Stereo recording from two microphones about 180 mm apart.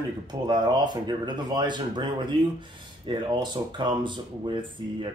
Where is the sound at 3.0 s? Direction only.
25° right (ahead or behind).